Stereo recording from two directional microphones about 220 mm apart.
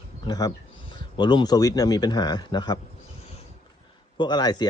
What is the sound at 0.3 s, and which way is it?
A man's voice, 15° left (ahead or behind).